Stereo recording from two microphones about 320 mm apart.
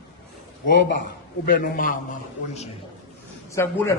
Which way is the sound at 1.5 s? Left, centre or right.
Left.